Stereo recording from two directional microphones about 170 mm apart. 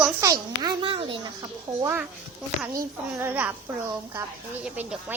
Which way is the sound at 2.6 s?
15° right (ahead or behind).